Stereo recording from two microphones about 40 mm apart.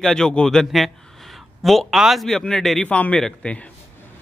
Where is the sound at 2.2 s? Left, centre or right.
Centre.